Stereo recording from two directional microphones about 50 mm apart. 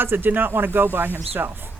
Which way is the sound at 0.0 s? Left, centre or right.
Right.